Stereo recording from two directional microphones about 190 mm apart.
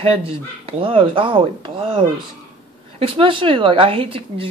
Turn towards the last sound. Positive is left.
turn(degrees=-30)  # may be behind; listen again after turning